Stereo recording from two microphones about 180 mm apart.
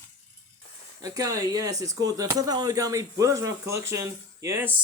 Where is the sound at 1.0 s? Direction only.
20° right (ahead or behind).